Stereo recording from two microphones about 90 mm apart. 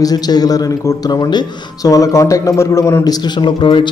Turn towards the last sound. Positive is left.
turn(degrees=60)  # may be behind; listen again after turning